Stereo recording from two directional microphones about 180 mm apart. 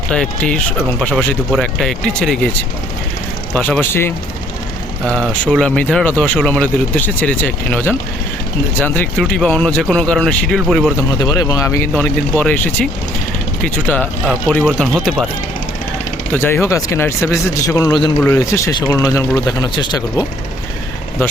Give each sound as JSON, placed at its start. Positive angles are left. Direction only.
{"t": 0.1, "sound": "speech", "side_deg": 5}
{"t": 3.5, "sound": "speech", "side_deg": 10}
{"t": 5.0, "sound": "speech", "side_deg": -5}
{"t": 5.3, "sound": "speech", "side_deg": 5}
{"t": 11.2, "sound": "speech", "side_deg": 20}
{"t": 11.9, "sound": "speech", "side_deg": 5}
{"t": 16.3, "sound": "speech", "side_deg": 15}